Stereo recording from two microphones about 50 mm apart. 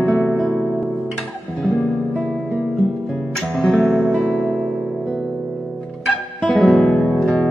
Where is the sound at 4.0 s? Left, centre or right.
Centre.